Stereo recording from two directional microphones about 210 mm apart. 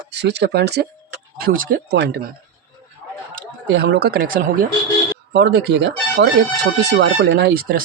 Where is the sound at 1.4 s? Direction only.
40° right (ahead or behind).